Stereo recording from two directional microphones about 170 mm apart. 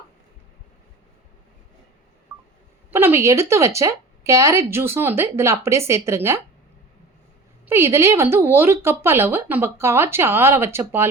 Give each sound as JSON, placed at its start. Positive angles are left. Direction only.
{"t": 2.3, "sound": "telephone dialing", "side_deg": -10}
{"t": 2.9, "sound": "speech", "side_deg": -15}
{"t": 7.7, "sound": "speech", "side_deg": -15}